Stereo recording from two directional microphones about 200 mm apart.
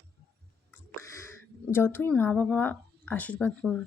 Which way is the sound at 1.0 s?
15° left (ahead or behind).